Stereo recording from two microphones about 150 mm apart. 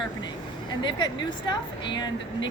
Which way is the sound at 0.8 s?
30° left (ahead or behind).